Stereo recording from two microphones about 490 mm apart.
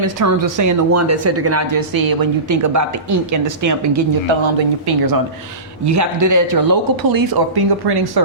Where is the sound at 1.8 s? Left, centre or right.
Right.